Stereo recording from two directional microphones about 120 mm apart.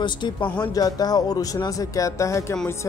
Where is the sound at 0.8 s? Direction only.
30° left (ahead or behind).